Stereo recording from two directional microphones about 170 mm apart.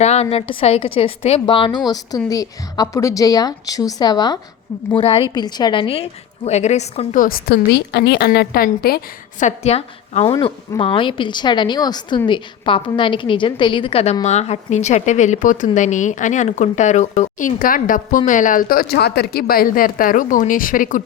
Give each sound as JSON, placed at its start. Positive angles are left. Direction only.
{"t": 0.0, "sound": "a woman's voice", "side_deg": 40}
{"t": 4.9, "sound": "a woman's voice", "side_deg": 35}
{"t": 5.3, "sound": "a woman's voice", "side_deg": 25}
{"t": 7.2, "sound": "a woman's voice", "side_deg": 65}
{"t": 9.4, "sound": "a woman's voice", "side_deg": 40}
{"t": 10.2, "sound": "a woman's voice", "side_deg": 25}